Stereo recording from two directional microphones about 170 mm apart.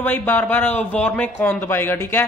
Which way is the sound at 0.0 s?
10° left (ahead or behind).